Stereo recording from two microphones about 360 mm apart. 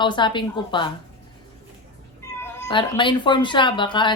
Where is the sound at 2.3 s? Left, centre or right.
Centre.